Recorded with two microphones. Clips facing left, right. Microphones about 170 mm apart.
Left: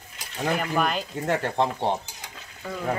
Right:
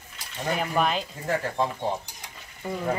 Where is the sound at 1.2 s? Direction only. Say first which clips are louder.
Left 3 dB; 75° left (ahead or behind).